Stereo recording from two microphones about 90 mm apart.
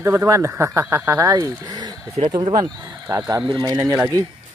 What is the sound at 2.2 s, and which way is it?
Speech, 60° right (ahead or behind).